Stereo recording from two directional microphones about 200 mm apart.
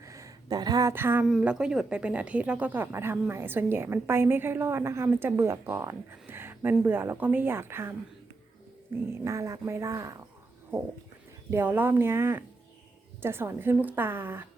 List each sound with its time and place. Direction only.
0.0 s speech: 15° right (ahead or behind)
11.5 s speech: 10° right (ahead or behind)